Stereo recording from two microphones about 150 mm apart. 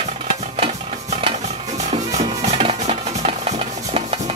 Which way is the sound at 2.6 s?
40° right (ahead or behind).